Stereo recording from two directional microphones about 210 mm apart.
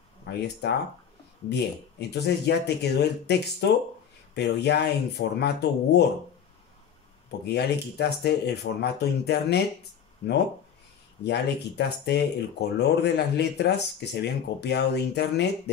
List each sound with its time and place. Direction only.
0.3 s speech: 55° left (ahead or behind)
7.2 s speech: 50° left (ahead or behind)
11.2 s speech: 55° left (ahead or behind)